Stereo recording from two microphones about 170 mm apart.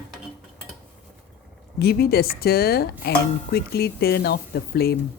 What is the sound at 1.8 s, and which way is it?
Speech, 65° left (ahead or behind).